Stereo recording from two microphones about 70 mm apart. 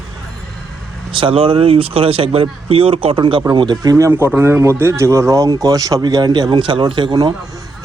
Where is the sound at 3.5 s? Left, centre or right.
Right.